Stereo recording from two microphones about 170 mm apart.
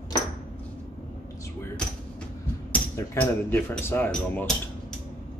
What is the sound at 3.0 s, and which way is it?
Speech, 15° left (ahead or behind).